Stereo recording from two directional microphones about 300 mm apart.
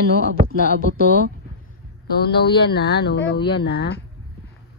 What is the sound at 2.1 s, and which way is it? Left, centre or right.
Speech, left.